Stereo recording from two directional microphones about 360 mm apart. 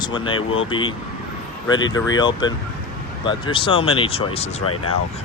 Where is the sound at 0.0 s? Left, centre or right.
Centre.